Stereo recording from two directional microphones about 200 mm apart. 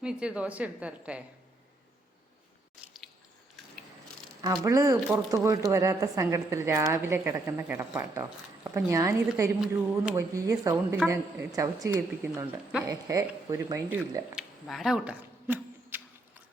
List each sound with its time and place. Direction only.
0.0 s a woman's voice: 5° right (ahead or behind)
2.8 s biting: centre (ahead or behind)
4.4 s a woman's voice: 15° right (ahead or behind)
4.9 s a woman's voice: centre (ahead or behind)
5.3 s a woman's voice: 15° right (ahead or behind)
14.3 s a sound: centre (ahead or behind)